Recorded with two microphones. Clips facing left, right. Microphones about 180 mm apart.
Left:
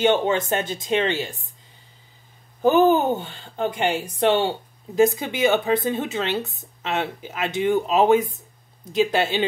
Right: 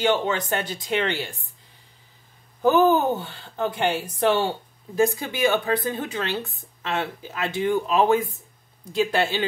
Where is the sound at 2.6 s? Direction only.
20° left (ahead or behind).